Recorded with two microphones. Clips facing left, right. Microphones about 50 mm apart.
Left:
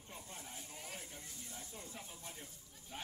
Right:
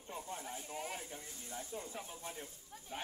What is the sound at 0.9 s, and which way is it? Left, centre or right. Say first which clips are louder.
Speech: right 5 dB; centre.